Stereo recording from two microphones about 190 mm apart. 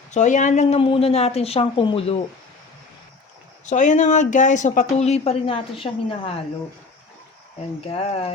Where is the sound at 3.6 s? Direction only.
40° left (ahead or behind).